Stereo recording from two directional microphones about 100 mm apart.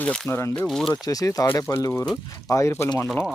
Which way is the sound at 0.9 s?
35° left (ahead or behind).